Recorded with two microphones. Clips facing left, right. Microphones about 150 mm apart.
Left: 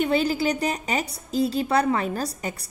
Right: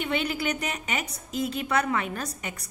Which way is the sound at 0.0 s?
35° left (ahead or behind).